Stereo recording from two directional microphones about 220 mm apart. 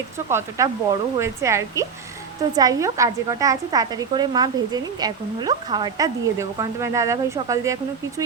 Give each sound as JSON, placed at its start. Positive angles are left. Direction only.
{"t": 0.3, "sound": "a woman's voice", "side_deg": -15}